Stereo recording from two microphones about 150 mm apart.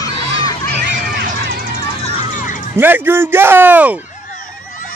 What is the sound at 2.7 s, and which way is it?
Speech, 15° right (ahead or behind).